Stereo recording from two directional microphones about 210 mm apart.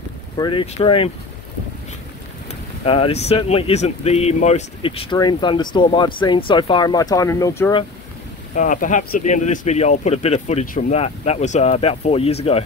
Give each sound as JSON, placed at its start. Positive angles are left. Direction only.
{"t": 0.4, "sound": "speech", "side_deg": 25}
{"t": 2.8, "sound": "speech", "side_deg": 25}
{"t": 8.5, "sound": "speech", "side_deg": 35}